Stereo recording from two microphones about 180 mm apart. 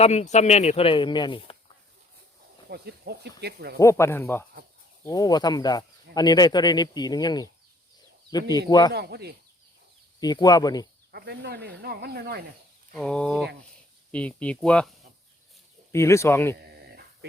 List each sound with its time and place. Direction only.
0.0 s speech: 35° left (ahead or behind)
2.6 s speech: 65° right (ahead or behind)
3.8 s speech: 15° left (ahead or behind)
8.9 s speech: 65° right (ahead or behind)
10.2 s speech: 20° left (ahead or behind)
11.1 s speech: 65° right (ahead or behind)
12.9 s speech: 5° left (ahead or behind)
15.9 s speech: 15° left (ahead or behind)
16.6 s a sound: 60° right (ahead or behind)